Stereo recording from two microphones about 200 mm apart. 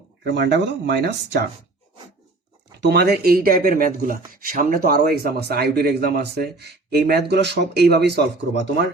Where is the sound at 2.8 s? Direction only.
55° right (ahead or behind).